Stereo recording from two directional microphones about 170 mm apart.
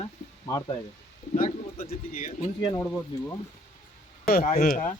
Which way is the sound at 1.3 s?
55° left (ahead or behind).